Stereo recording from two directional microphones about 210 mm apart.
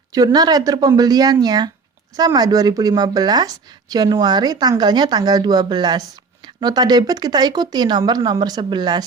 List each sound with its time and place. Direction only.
0.1 s speech: 15° right (ahead or behind)